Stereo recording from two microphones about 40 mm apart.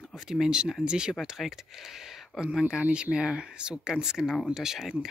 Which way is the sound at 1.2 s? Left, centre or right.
Centre.